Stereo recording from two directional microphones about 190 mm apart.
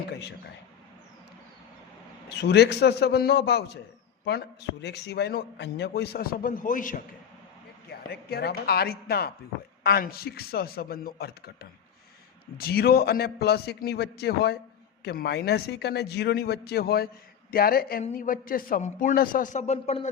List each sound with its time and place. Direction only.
0.1 s a man's voice: 65° left (ahead or behind)
2.4 s a man's voice: 60° left (ahead or behind); by 7.0 s 45° left (ahead or behind)
7.9 s a man's voice: 55° left (ahead or behind); by 20.1 s 35° left (ahead or behind)